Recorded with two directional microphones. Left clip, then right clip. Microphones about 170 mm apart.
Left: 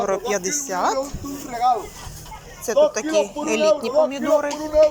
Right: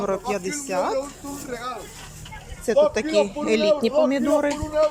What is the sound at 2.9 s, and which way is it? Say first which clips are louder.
A man's voice: even; 25° right (ahead or behind).